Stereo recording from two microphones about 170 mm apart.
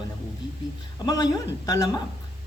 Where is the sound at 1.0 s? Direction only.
20° left (ahead or behind).